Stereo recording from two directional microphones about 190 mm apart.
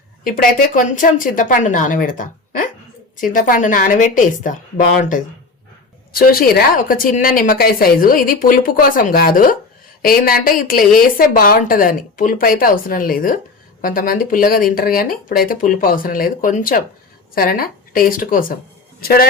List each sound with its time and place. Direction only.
0.8 s a woman's voice: 45° left (ahead or behind)
6.1 s a woman's voice: 50° left (ahead or behind)